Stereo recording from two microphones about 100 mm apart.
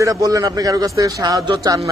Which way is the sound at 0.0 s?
35° right (ahead or behind).